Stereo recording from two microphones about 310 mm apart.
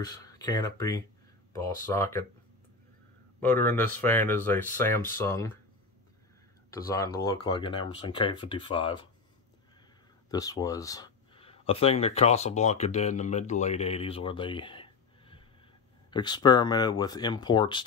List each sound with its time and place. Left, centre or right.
0.0 s speech: centre
3.3 s speech: centre
7.4 s speech: centre
10.3 s speech: centre